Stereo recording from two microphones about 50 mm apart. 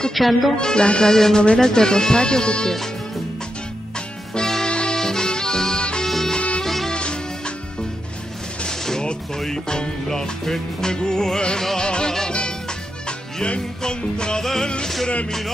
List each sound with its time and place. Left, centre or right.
0.1 s speech: centre
0.6 s speech: centre
4.4 s music: centre
6.0 s music: centre
6.3 s music: left
6.6 s music: centre
6.9 s music: centre
8.6 s music: centre
13.4 s speech: centre